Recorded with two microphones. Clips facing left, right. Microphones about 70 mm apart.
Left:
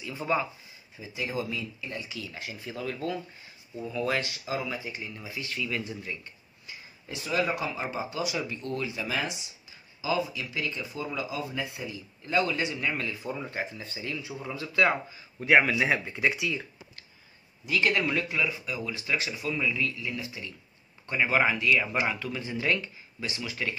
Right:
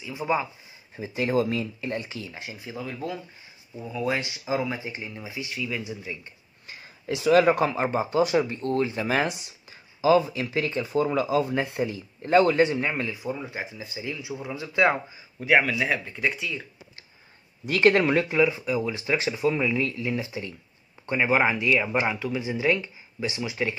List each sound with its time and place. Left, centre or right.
0.0 s speech: centre
0.9 s speech: right
2.3 s speech: centre
7.1 s speech: right
7.4 s speech: right
13.1 s speech: centre
15.4 s speech: centre
17.6 s speech: right
18.3 s speech: right